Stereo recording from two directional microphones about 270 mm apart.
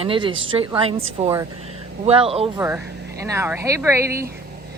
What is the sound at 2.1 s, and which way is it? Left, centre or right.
Speech, right.